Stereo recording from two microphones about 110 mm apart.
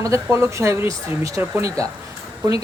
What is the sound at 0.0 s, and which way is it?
Speech, 25° right (ahead or behind).